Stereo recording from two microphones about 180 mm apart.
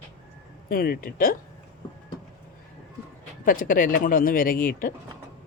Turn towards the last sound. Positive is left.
turn(degrees=50)  # may be behind; listen again after turning